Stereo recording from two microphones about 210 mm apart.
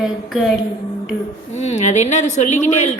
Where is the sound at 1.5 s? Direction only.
35° left (ahead or behind).